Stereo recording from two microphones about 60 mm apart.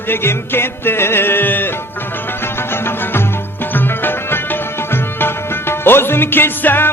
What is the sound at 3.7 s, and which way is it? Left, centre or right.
Music, left.